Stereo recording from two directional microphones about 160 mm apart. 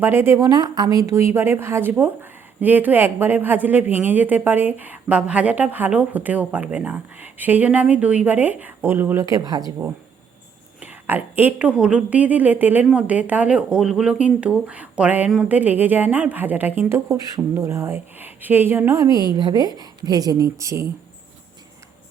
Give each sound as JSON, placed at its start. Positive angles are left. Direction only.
{"t": 0.0, "sound": "a woman's voice", "side_deg": -15}
{"t": 10.8, "sound": "a woman's voice", "side_deg": -10}